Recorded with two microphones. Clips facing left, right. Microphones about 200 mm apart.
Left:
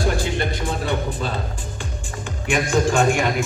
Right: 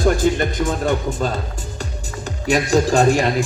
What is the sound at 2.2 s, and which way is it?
A man's voice, 40° right (ahead or behind).